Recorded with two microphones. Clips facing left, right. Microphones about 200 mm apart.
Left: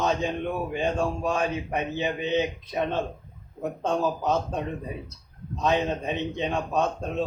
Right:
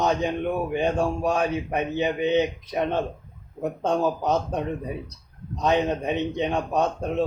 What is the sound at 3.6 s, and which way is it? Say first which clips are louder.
A man's voice: right 3 dB; 15° right (ahead or behind).